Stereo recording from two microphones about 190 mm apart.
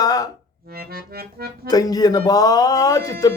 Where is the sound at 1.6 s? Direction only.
20° left (ahead or behind).